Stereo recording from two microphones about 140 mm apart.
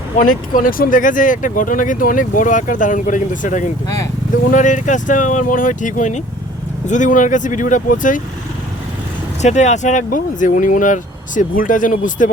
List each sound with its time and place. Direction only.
0.2 s speech: 80° left; by 3.7 s 65° left (ahead or behind)
3.8 s speech: 25° left (ahead or behind)
4.5 s speech: 65° left (ahead or behind)
9.4 s speech: 55° left (ahead or behind); by 12.3 s 70° left (ahead or behind)